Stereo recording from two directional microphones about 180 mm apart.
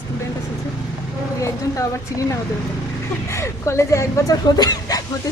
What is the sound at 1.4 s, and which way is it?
Speech, 15° left (ahead or behind).